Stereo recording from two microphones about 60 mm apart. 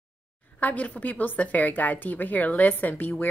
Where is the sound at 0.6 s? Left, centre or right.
Left.